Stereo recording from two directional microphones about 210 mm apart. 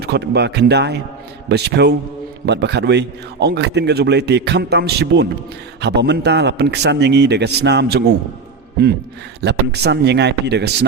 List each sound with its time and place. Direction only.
0.0 s a man's voice: 50° right (ahead or behind)
9.4 s a man's voice: 50° right (ahead or behind)